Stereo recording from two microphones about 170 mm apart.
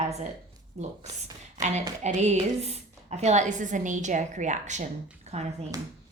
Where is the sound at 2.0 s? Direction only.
40° right (ahead or behind).